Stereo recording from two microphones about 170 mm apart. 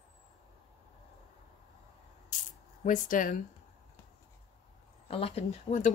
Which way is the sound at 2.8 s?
50° left (ahead or behind).